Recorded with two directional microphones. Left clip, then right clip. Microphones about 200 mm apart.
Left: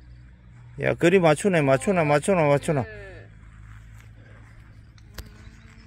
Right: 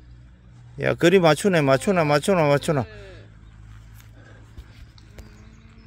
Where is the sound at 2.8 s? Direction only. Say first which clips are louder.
Left 2 dB; 15° left (ahead or behind).